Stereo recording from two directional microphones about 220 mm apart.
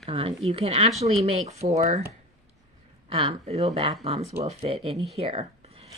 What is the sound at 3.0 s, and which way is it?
Speech, 25° right (ahead or behind).